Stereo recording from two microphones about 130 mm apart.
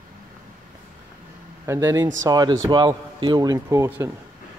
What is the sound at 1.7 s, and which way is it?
Speech, 20° right (ahead or behind).